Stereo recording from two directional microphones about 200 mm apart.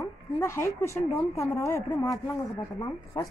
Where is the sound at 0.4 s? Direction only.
15° left (ahead or behind).